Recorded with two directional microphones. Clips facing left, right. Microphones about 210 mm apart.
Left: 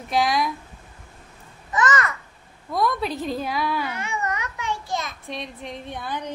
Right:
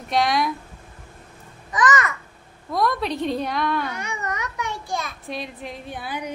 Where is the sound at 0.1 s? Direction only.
Centre (ahead or behind).